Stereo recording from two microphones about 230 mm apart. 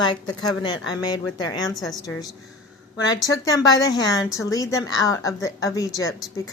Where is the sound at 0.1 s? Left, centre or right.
Centre.